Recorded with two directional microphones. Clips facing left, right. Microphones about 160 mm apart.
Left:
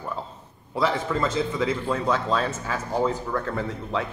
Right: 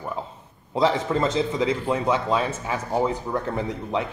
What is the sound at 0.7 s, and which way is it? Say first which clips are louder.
A man's voice: right 3 dB; 20° right (ahead or behind).